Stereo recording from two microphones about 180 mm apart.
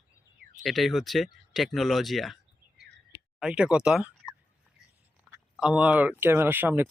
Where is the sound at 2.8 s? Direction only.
70° right (ahead or behind).